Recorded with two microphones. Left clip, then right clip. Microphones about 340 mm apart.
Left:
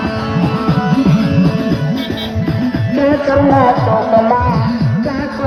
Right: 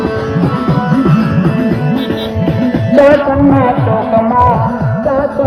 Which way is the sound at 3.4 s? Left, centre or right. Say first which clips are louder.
Even; left.